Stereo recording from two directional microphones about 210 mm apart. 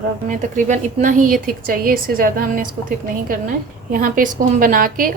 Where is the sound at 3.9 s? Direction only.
40° right (ahead or behind).